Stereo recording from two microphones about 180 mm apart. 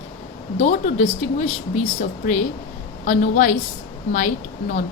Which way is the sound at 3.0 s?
45° left (ahead or behind).